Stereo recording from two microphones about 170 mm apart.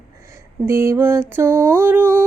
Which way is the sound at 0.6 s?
15° right (ahead or behind).